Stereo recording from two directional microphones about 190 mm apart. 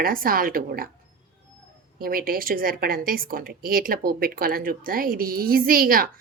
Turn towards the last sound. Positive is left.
turn(degrees=-50)  # may be behind; listen again after turning